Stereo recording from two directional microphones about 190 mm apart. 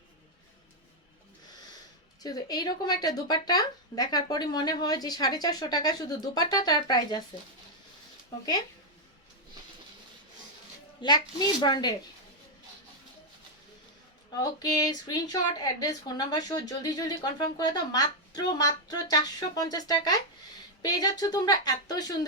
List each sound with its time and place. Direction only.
2.2 s speech: 20° left (ahead or behind)
11.0 s speech: 20° left (ahead or behind)
14.4 s speech: 20° left (ahead or behind)